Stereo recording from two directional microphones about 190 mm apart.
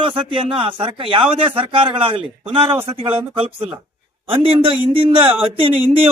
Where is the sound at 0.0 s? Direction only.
25° right (ahead or behind).